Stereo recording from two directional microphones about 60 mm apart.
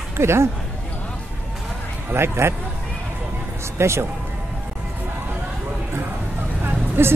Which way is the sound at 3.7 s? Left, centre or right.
Right.